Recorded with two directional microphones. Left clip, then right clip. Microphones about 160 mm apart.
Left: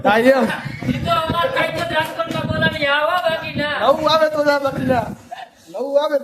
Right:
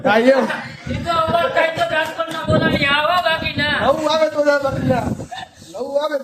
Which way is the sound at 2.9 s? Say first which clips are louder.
Right 1 dB; 45° left (ahead or behind).